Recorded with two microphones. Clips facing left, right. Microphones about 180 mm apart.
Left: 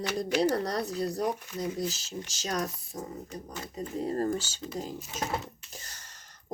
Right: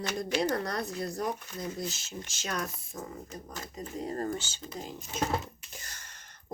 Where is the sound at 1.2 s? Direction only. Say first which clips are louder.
Left 3 dB; 10° left (ahead or behind).